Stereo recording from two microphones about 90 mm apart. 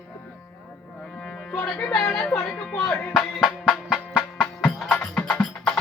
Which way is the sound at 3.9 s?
5° right (ahead or behind).